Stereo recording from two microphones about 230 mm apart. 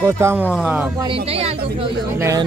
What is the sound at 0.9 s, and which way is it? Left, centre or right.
Speech, right.